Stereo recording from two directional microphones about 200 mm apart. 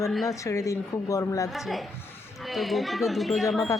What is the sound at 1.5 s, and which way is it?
Speech, centre (ahead or behind).